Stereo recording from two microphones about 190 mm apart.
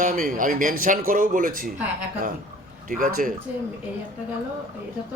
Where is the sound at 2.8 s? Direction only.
45° right (ahead or behind).